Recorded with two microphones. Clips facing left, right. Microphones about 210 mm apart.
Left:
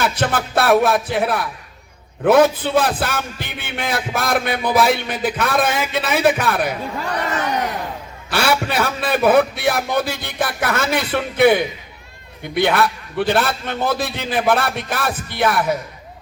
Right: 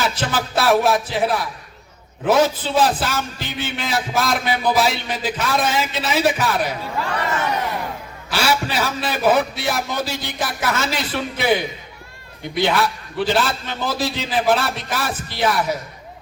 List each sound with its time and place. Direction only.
0.0 s a man's voice: 60° left (ahead or behind)
8.3 s a man's voice: 60° left (ahead or behind)